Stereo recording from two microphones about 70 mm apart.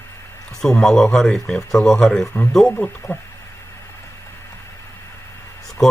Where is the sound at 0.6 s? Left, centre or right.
Centre.